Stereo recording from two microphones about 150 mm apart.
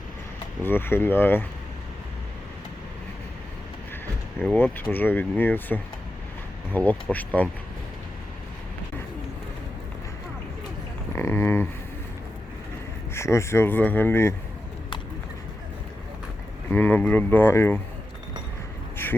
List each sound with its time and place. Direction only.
0.6 s speech: 15° left (ahead or behind)
4.4 s speech: 15° left (ahead or behind)
11.1 s a sound: 20° left (ahead or behind)
13.1 s speech: 20° left (ahead or behind)
16.7 s speech: 10° left (ahead or behind)
19.0 s a sound: 15° left (ahead or behind)